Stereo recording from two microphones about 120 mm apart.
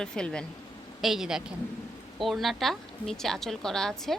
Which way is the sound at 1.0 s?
5° right (ahead or behind).